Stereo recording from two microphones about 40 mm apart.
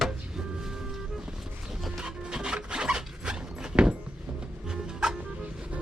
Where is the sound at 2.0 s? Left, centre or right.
Right.